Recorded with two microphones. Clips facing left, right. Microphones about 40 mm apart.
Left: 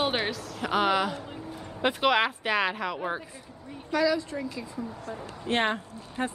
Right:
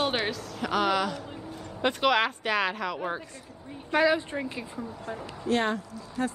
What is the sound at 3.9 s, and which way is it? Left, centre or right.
Speech, right.